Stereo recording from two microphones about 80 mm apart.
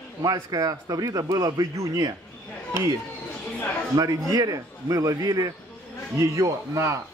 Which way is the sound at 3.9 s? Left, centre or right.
Right.